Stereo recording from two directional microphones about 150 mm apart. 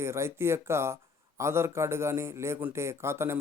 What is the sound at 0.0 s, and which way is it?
Speech, 15° right (ahead or behind).